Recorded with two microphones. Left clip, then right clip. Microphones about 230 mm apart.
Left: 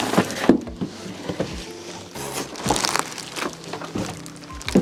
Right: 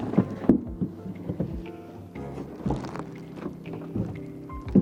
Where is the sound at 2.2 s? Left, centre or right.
Centre.